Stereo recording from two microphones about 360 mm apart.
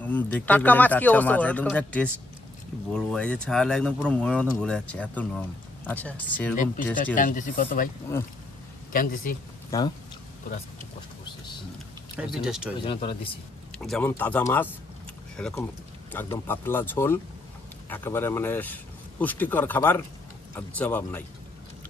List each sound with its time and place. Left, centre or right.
0.0 s speech: centre
6.5 s speech: left
8.9 s speech: left
9.7 s speech: centre
12.2 s speech: centre
12.8 s speech: centre
13.7 s speech: centre